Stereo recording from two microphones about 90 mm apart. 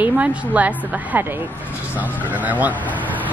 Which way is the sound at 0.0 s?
15° right (ahead or behind).